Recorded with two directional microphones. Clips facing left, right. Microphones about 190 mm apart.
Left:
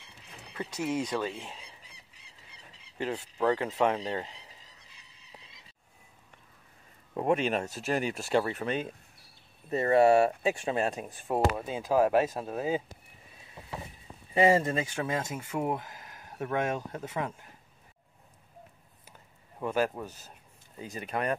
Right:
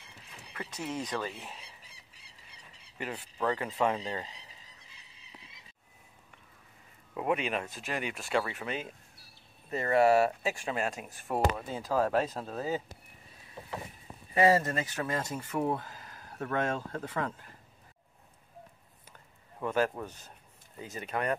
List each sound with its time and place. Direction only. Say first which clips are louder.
0.7 s speech: left 5 dB; 10° left (ahead or behind)
3.1 s speech: left 4 dB; 10° left (ahead or behind)
7.2 s speech: left 4 dB; 40° left (ahead or behind)
11.2 s speech: left 2 dB; 20° left (ahead or behind)
14.3 s speech: left 1 dB; 20° left (ahead or behind)
19.6 s speech: left 1 dB; 10° left (ahead or behind)
20.9 s speech: left 1 dB; 30° left (ahead or behind)